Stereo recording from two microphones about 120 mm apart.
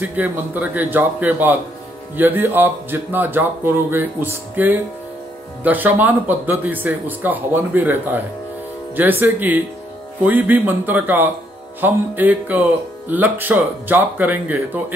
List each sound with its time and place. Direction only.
0.0 s speech: 15° right (ahead or behind)